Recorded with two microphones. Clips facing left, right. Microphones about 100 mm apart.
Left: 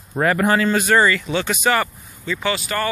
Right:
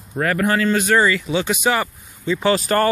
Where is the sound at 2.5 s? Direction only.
40° right (ahead or behind).